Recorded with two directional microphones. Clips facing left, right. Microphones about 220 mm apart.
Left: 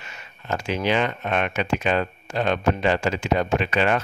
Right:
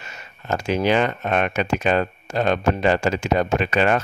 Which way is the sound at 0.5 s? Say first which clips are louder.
Right 4 dB; 40° right (ahead or behind).